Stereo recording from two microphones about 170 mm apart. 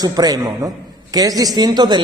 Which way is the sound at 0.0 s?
25° right (ahead or behind).